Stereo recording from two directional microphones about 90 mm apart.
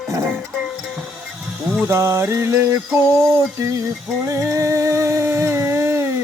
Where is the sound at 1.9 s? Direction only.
30° right (ahead or behind).